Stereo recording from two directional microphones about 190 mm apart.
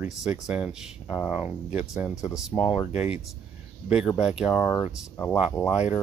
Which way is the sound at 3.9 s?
5° right (ahead or behind).